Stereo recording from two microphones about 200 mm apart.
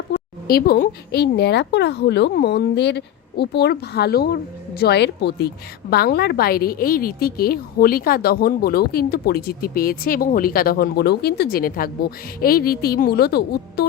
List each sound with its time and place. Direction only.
0.1 s a woman's voice: 50° left (ahead or behind)